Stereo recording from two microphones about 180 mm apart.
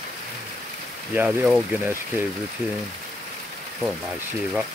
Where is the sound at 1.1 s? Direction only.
5° right (ahead or behind).